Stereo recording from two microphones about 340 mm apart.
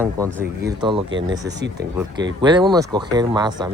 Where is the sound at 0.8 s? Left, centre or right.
Centre.